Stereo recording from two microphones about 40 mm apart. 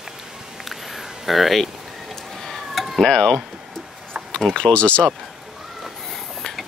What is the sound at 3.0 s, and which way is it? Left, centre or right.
Speech, centre.